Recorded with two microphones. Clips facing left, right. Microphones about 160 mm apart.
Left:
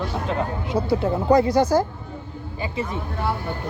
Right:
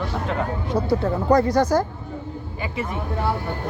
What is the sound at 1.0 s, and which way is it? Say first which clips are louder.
Speech: left 2 dB; 10° left (ahead or behind).